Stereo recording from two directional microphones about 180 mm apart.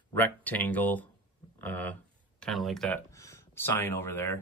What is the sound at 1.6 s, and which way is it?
Speech, 10° left (ahead or behind).